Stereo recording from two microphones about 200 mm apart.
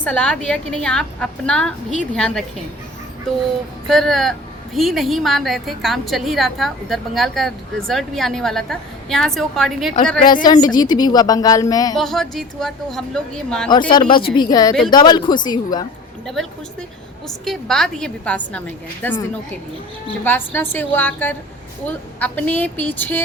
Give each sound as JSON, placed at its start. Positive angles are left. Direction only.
{"t": 0.0, "sound": "a woman's voice", "side_deg": 5}
{"t": 3.8, "sound": "a woman's voice", "side_deg": 0}
{"t": 10.3, "sound": "a woman's voice", "side_deg": 20}
{"t": 11.9, "sound": "a woman's voice", "side_deg": 0}
{"t": 13.9, "sound": "a woman's voice", "side_deg": 25}
{"t": 16.2, "sound": "a woman's voice", "side_deg": 0}
{"t": 20.2, "sound": "a woman's voice", "side_deg": 10}